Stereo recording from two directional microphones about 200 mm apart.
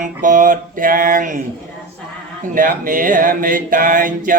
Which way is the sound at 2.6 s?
45° right (ahead or behind).